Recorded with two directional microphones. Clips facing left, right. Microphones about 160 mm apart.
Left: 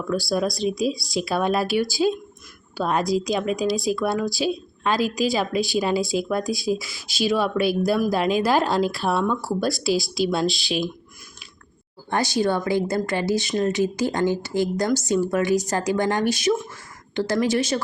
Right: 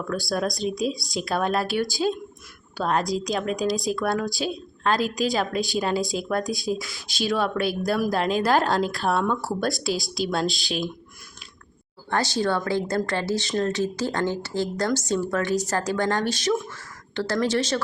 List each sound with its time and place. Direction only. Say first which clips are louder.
0.3 s speech: left 1 dB; centre (ahead or behind)
10.5 s speech: left 3 dB; 45° right (ahead or behind)
12.1 s speech: left 2 dB; 10° left (ahead or behind)